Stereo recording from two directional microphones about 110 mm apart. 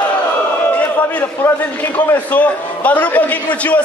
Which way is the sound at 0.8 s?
15° left (ahead or behind).